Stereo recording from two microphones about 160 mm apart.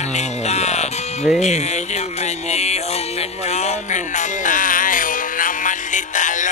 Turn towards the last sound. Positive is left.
turn(degrees=50)  # may be behind; listen again after turning